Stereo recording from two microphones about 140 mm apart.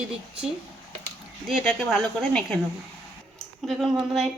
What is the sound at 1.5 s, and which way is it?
Speech, centre (ahead or behind).